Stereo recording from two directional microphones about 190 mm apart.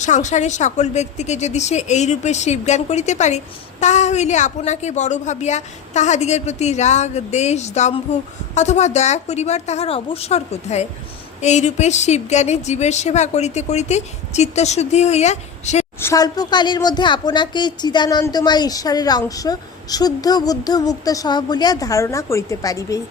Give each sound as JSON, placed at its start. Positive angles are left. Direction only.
{"t": 0.0, "sound": "a woman's voice", "side_deg": 40}
{"t": 16.0, "sound": "a woman's voice", "side_deg": 15}